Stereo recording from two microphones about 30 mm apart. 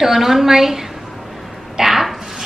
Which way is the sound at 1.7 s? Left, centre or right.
Centre.